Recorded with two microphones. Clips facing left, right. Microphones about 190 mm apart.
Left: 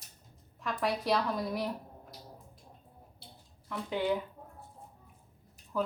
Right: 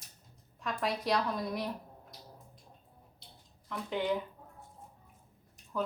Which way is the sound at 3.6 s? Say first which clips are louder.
Left 1 dB; 5° left (ahead or behind).